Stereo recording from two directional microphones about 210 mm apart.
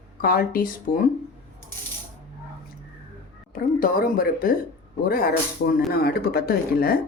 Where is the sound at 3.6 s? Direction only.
40° left (ahead or behind).